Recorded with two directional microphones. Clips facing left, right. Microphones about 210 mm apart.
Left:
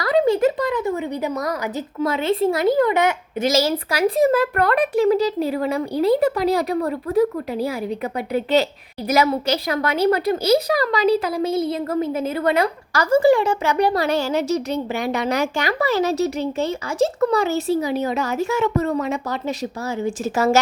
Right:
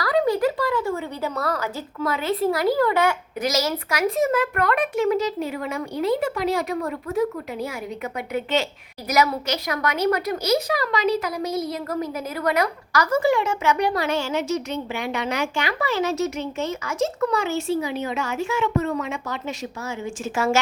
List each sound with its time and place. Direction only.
0.0 s speech: 25° left (ahead or behind)